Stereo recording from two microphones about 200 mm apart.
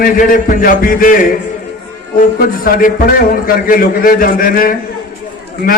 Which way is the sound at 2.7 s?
45° left (ahead or behind).